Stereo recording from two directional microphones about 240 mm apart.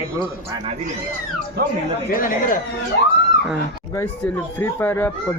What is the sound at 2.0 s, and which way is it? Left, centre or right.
Speech, left.